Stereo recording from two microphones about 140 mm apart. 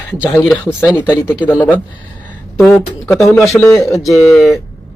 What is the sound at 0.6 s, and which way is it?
Speech, 15° left (ahead or behind).